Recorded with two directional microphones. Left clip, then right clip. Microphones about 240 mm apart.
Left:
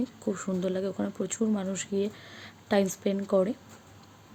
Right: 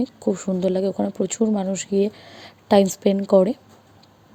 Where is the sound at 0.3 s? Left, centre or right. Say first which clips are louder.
Right 9 dB; centre.